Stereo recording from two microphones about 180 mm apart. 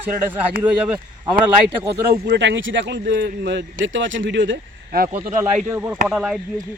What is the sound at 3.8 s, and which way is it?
Speech, 90° right.